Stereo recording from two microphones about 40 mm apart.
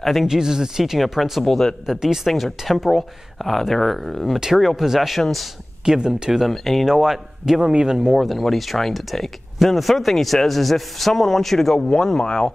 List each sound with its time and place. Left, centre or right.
0.0 s speech: centre
0.3 s speech: centre
0.9 s speech: centre
1.4 s speech: centre
2.0 s speech: centre
5.2 s speech: centre
5.9 s speech: right
6.4 s speech: centre
6.9 s speech: centre
8.1 s speech: centre